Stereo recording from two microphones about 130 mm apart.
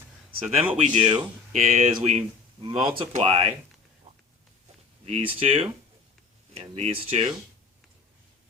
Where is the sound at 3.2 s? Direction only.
50° right (ahead or behind).